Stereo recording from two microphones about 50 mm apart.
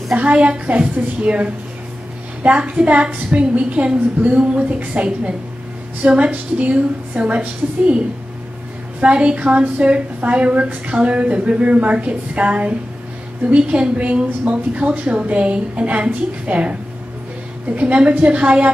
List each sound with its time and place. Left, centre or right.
0.1 s a woman's voice: right
9.0 s a woman's voice: right
17.7 s a woman's voice: right